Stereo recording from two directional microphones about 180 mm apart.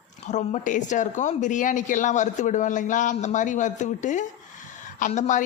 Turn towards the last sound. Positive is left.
turn(degrees=45)  # may be behind; listen again after turning